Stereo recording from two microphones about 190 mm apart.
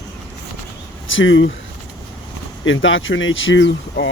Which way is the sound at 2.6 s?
90° left.